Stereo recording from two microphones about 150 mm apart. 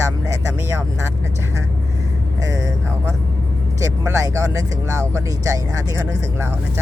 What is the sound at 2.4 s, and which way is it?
Vehicle, 20° right (ahead or behind).